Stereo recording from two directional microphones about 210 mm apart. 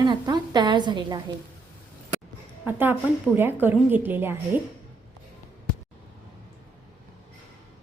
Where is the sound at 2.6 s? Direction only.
10° right (ahead or behind).